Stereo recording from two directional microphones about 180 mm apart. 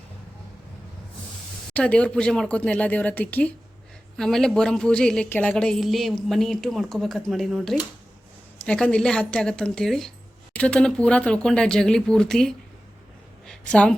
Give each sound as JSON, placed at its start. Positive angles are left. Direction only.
{"t": 1.7, "sound": "a woman's voice", "side_deg": 5}